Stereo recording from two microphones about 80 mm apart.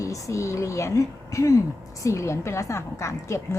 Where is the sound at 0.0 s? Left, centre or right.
Left.